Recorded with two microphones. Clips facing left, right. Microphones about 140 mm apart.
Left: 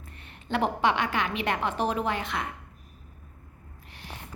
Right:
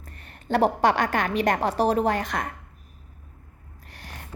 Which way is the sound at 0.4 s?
40° right (ahead or behind).